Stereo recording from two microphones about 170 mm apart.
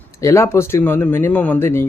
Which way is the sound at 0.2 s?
15° left (ahead or behind).